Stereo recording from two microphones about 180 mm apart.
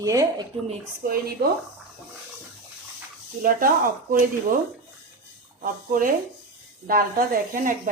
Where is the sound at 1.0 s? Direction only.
55° right (ahead or behind).